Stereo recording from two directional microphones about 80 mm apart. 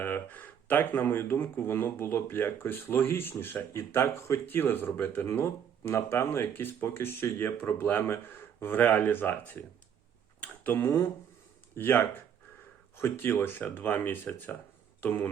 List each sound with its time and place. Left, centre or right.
0.0 s speech: left
10.4 s tick-tock: left
11.7 s speech: left